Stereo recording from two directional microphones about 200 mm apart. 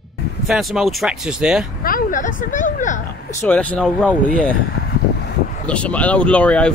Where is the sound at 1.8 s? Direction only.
40° left (ahead or behind).